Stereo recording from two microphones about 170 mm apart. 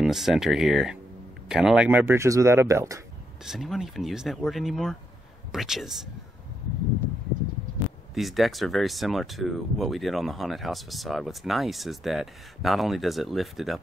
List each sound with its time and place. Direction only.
0.0 s speech: centre (ahead or behind)
3.4 s speech: centre (ahead or behind)
8.1 s speech: centre (ahead or behind)